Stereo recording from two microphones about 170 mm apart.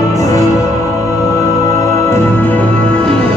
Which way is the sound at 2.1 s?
10° left (ahead or behind).